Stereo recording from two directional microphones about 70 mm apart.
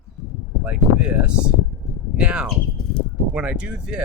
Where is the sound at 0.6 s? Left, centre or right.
Centre.